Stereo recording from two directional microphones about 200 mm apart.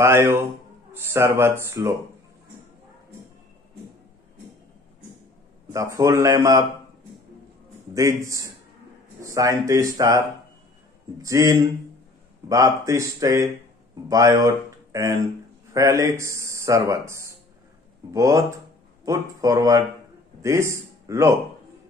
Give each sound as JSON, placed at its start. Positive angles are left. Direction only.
{"t": 0.0, "sound": "a man's voice", "side_deg": -10}
{"t": 5.7, "sound": "a man's voice", "side_deg": -15}
{"t": 7.9, "sound": "a man's voice", "side_deg": -15}
{"t": 11.2, "sound": "a man's voice", "side_deg": -15}